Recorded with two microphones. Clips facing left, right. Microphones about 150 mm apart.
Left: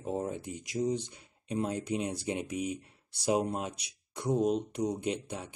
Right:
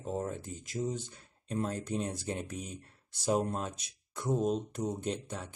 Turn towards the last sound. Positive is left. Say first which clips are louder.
# left 2 dB
turn(degrees=10)  # may be behind; listen again after turning